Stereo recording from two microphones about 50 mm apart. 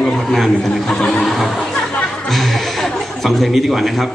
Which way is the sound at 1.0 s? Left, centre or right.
Centre.